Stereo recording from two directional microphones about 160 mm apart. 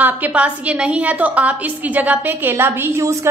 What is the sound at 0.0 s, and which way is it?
A woman's voice, 10° right (ahead or behind).